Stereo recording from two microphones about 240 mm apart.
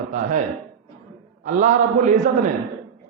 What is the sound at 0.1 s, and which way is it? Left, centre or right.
Speech, right.